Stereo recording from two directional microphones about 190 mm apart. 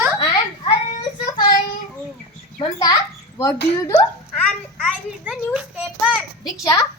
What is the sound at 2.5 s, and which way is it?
Speech, 20° left (ahead or behind).